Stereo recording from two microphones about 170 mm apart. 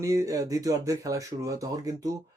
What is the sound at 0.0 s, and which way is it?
Speech, 20° right (ahead or behind).